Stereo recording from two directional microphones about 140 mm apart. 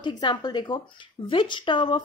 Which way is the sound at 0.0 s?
30° left (ahead or behind).